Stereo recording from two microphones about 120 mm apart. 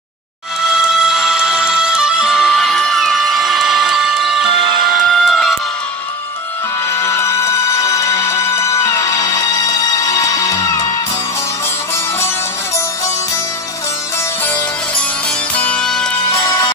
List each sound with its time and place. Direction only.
0.7 s music: 5° right (ahead or behind)
6.9 s music: 20° left (ahead or behind)
14.4 s music: 15° left (ahead or behind)
16.3 s music: 25° left (ahead or behind)